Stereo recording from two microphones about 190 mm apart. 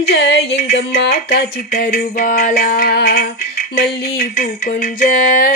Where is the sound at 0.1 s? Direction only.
60° left (ahead or behind).